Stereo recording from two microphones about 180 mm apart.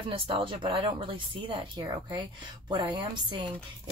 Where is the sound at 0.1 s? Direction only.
30° right (ahead or behind).